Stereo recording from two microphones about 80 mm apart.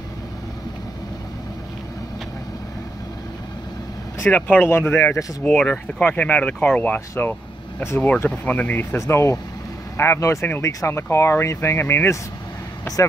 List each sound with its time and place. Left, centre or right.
4.3 s speech: centre
4.6 s speech: left
5.4 s speech: centre; by 8.1 s left
8.3 s speech: centre
8.9 s speech: left